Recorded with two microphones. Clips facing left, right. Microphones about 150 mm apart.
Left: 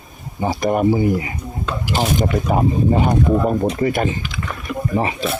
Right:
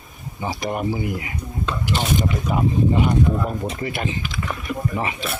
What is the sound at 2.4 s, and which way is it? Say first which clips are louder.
Speech: left 2 dB; 40° left (ahead or behind).